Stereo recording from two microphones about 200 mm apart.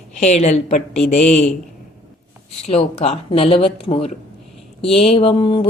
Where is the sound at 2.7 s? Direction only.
30° left (ahead or behind).